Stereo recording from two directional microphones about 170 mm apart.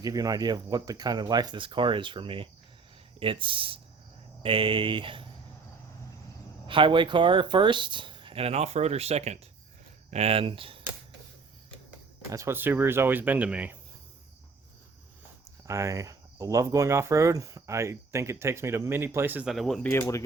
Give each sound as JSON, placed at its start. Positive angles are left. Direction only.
{"t": 0.0, "sound": "speech", "side_deg": -20}
{"t": 6.7, "sound": "speech", "side_deg": -30}
{"t": 12.3, "sound": "speech", "side_deg": -15}
{"t": 15.6, "sound": "speech", "side_deg": -15}
{"t": 19.9, "sound": "speech", "side_deg": 15}